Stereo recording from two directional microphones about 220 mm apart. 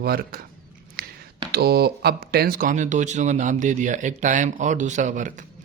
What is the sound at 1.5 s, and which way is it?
A man's voice, 45° right (ahead or behind).